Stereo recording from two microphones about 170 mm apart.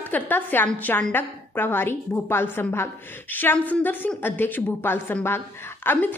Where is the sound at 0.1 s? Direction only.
10° left (ahead or behind).